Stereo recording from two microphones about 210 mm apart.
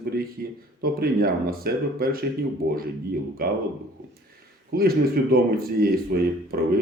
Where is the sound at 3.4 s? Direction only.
45° right (ahead or behind).